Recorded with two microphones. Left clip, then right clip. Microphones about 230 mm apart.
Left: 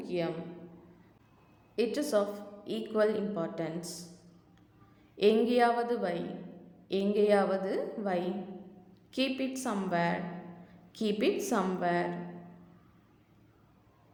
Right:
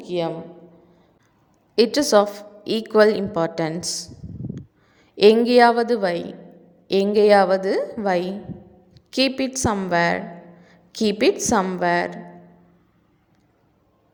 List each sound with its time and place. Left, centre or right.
0.0 s a man's voice: right
1.7 s a woman's voice: right
5.1 s a woman's voice: right
10.7 s a sound: right
11.4 s a woman's voice: right